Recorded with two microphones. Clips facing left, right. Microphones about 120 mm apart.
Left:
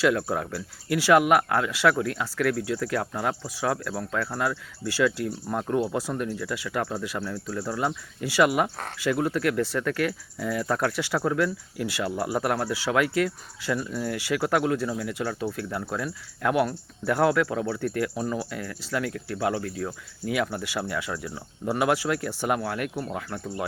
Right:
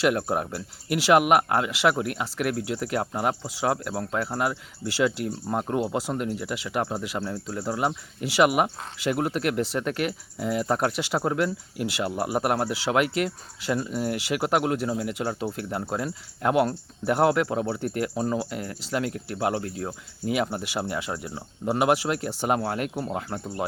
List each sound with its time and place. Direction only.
0.0 s speech: 20° right (ahead or behind)